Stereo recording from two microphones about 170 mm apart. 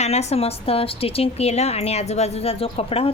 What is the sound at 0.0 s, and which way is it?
A woman's voice, 40° left (ahead or behind).